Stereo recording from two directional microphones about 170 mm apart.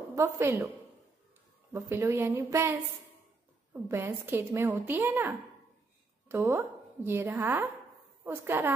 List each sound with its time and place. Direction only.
0.1 s a woman's voice: 15° right (ahead or behind)
1.7 s a woman's voice: 15° right (ahead or behind)
3.9 s a woman's voice: 15° right (ahead or behind)